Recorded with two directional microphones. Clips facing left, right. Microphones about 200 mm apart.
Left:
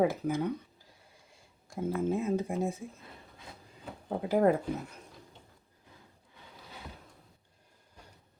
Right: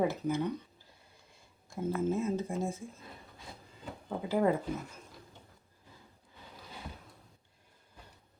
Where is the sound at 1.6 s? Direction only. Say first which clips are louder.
Left 1 dB; 15° left (ahead or behind).